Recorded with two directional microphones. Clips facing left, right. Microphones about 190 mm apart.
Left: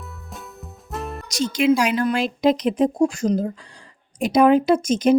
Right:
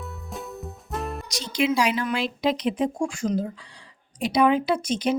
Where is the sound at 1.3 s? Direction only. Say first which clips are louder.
Left 7 dB; 45° left (ahead or behind).